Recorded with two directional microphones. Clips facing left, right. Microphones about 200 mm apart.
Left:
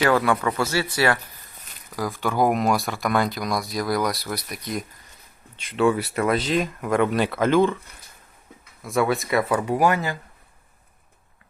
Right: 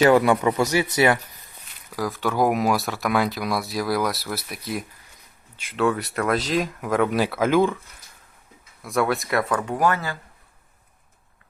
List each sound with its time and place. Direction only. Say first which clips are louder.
0.0 s a man's voice: right 4 dB; 20° right (ahead or behind)
2.0 s speech: even; centre (ahead or behind)
8.8 s speech: left 1 dB; centre (ahead or behind)